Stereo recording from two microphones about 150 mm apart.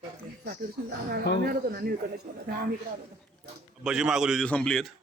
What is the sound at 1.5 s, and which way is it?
A man's voice, 85° right.